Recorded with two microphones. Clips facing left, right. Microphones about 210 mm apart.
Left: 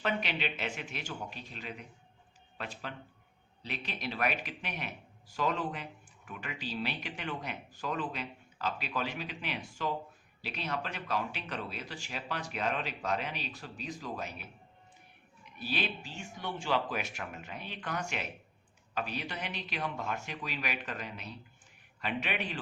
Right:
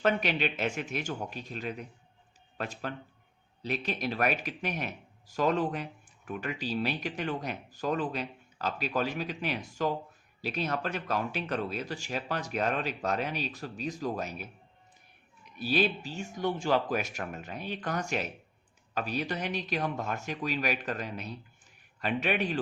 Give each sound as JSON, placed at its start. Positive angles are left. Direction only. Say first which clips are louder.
{"t": 0.0, "sound": "speech", "louder": "right 6 dB", "side_deg": -45}
{"t": 15.5, "sound": "speech", "louder": "right 8 dB", "side_deg": -40}